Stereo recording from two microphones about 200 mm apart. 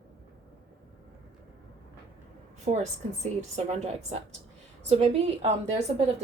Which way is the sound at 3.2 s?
35° right (ahead or behind).